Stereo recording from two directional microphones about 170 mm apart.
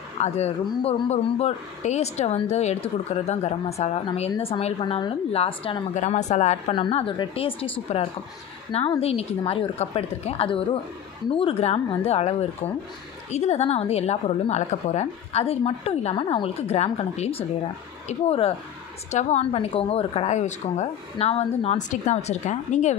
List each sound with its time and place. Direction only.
0.2 s speech: 40° left (ahead or behind)
8.7 s speech: 35° left (ahead or behind)